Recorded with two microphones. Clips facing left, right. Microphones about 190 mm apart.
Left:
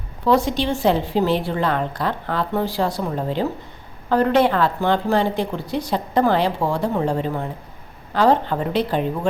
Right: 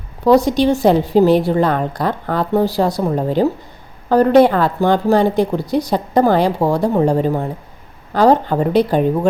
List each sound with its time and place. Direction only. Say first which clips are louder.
0.3 s speech: right 7 dB; 40° right (ahead or behind)